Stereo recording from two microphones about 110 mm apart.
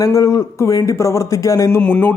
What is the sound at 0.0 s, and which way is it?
A man's voice, 30° left (ahead or behind).